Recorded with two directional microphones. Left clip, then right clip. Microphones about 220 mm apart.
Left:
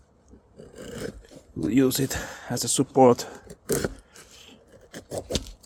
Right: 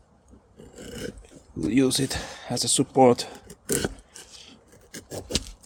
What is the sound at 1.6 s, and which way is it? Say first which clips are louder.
Speech: even; 10° left (ahead or behind).